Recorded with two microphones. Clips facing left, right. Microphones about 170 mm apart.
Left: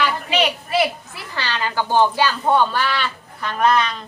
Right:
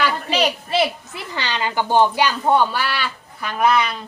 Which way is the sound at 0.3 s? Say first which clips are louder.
Even; 35° right (ahead or behind).